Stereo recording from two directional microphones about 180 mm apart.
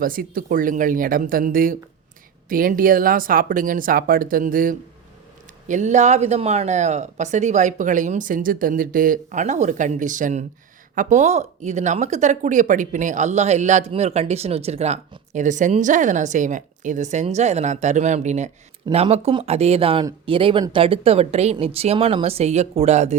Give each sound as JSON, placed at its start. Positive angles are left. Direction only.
{"t": 0.0, "sound": "speech", "side_deg": -50}